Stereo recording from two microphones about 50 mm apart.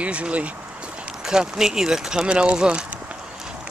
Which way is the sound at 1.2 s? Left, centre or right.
Centre.